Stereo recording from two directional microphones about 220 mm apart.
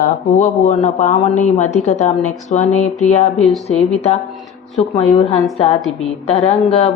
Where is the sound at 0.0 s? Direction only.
35° left (ahead or behind).